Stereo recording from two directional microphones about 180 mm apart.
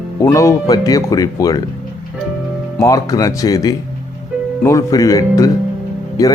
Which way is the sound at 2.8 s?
20° left (ahead or behind).